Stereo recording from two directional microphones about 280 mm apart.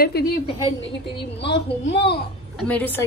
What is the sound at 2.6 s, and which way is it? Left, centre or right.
Speech, centre.